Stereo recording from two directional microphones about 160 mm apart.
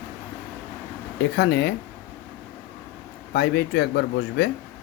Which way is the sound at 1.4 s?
90° left.